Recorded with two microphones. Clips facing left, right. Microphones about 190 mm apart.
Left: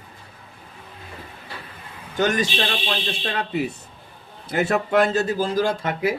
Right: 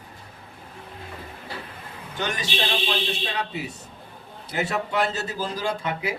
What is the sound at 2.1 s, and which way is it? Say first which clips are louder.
Speech: left 7 dB; 45° left (ahead or behind).